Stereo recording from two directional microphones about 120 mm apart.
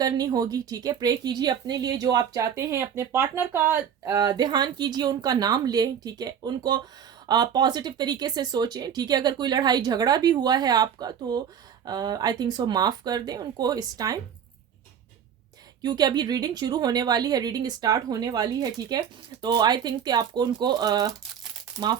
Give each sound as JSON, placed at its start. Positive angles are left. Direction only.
{"t": 0.0, "sound": "a woman's voice", "side_deg": -35}
{"t": 4.1, "sound": "a woman's voice", "side_deg": -35}
{"t": 15.8, "sound": "a woman's voice", "side_deg": -35}